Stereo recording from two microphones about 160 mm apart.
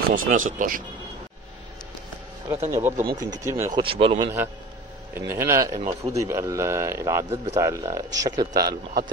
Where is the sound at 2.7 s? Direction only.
15° right (ahead or behind).